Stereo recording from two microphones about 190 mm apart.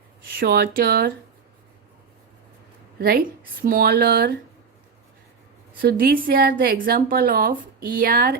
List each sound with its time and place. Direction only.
0.3 s speech: 55° right (ahead or behind)
3.0 s speech: 50° right (ahead or behind)
5.8 s speech: 55° right (ahead or behind)